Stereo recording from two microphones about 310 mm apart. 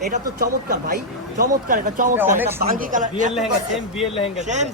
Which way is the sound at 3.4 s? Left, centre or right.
Centre.